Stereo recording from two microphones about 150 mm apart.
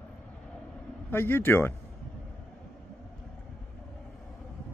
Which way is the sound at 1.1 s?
15° left (ahead or behind).